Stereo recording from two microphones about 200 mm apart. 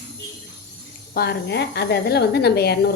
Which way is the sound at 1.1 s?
50° left (ahead or behind).